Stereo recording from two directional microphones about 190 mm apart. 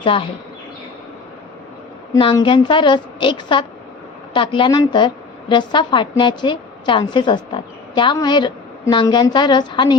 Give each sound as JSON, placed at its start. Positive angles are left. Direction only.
{"t": 0.0, "sound": "a woman's voice", "side_deg": 30}
{"t": 2.1, "sound": "a woman's voice", "side_deg": 25}